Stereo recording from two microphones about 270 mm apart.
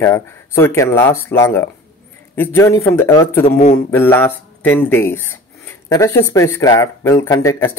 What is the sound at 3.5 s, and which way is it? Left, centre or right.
Speech, left.